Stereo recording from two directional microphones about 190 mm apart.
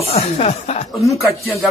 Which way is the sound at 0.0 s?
30° left (ahead or behind).